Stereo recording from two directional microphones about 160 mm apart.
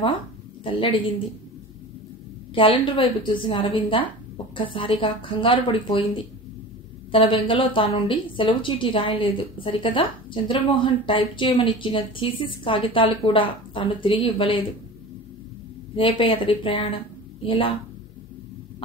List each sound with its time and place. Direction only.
0.7 s a woman's voice: 35° left (ahead or behind)
2.5 s a woman's voice: 35° left (ahead or behind)
16.0 s a woman's voice: 30° left (ahead or behind)